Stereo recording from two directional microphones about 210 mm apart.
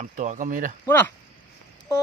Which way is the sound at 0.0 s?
35° right (ahead or behind).